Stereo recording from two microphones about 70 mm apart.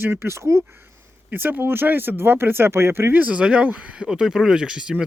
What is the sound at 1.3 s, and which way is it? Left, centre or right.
Speech, right.